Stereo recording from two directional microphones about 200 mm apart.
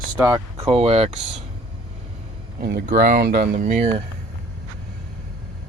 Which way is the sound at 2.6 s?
55° right (ahead or behind).